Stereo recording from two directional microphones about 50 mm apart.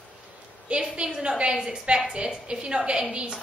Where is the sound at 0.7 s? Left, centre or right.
Centre.